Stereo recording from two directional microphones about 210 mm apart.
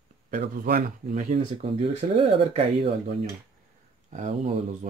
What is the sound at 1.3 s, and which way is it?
Speech, 30° right (ahead or behind).